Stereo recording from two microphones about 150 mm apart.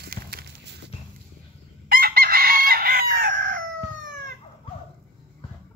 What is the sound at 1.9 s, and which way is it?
Chicken, 80° right.